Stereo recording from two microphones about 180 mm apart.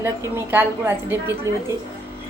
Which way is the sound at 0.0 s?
15° right (ahead or behind).